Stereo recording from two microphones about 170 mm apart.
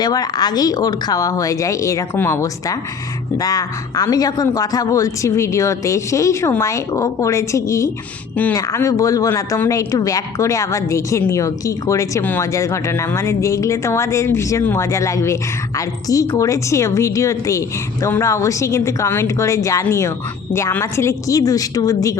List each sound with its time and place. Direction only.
0.0 s speech: 25° left (ahead or behind)